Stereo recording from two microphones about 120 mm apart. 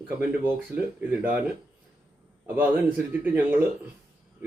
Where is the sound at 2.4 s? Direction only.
15° right (ahead or behind).